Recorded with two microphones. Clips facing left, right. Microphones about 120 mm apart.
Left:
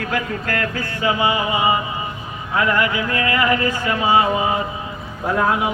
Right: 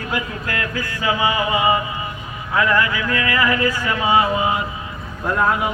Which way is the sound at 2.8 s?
30° left (ahead or behind).